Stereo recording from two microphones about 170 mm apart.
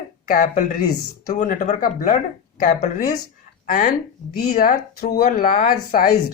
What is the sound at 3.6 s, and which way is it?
Speech, 50° left (ahead or behind).